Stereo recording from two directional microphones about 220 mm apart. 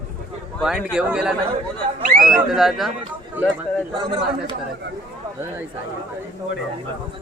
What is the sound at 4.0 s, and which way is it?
Speech, 20° right (ahead or behind).